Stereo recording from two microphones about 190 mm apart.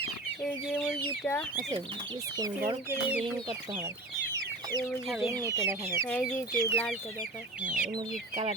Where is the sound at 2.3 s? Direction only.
20° right (ahead or behind).